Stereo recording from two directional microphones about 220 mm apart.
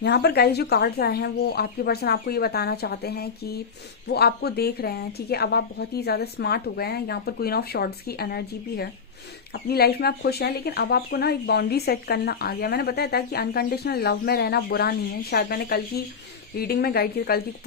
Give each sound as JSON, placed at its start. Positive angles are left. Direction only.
{"t": 0.0, "sound": "speech", "side_deg": 50}